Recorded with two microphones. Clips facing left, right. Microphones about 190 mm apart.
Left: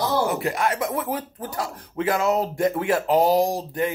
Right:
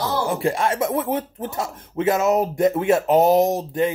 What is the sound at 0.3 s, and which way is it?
Speech, 30° right (ahead or behind).